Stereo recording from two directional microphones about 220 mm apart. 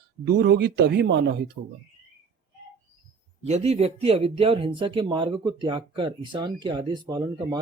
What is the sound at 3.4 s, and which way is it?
Speech, 30° right (ahead or behind).